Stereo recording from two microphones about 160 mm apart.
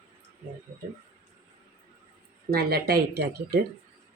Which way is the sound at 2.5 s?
70° right (ahead or behind).